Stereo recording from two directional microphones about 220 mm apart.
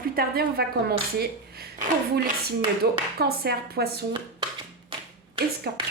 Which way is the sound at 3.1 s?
45° right (ahead or behind).